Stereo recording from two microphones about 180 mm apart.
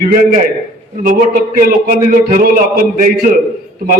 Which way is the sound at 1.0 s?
50° right (ahead or behind).